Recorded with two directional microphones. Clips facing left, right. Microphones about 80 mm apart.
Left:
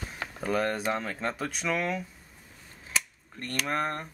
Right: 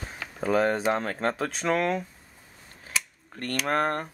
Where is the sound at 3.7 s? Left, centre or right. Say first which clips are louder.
Right 5 dB; right.